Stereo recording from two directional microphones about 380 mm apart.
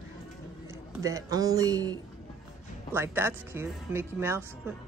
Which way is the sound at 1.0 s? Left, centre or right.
Centre.